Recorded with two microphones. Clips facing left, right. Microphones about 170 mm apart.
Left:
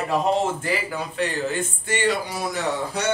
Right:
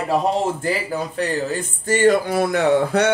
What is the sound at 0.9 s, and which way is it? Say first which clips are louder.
Speech: right 4 dB; 40° right (ahead or behind).